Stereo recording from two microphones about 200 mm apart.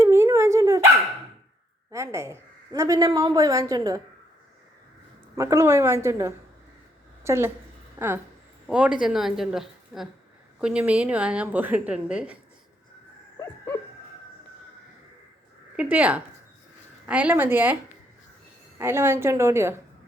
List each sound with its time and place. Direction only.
0.0 s dog: 15° right (ahead or behind)
1.9 s a woman's voice: 15° right (ahead or behind)
5.4 s a woman's voice: 15° right (ahead or behind)
15.7 s a woman's voice: 5° right (ahead or behind)
18.8 s a woman's voice: 10° right (ahead or behind)